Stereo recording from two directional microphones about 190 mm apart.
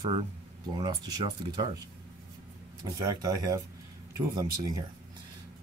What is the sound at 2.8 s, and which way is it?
Speech, 20° right (ahead or behind).